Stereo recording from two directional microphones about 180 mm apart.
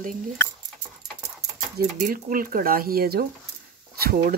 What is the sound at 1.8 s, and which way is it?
Speech, 45° right (ahead or behind).